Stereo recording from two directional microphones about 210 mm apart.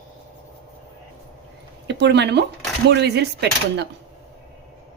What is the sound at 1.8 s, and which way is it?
A woman's voice, 55° right (ahead or behind).